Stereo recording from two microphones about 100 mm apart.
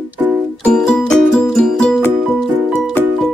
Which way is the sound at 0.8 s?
5° left (ahead or behind).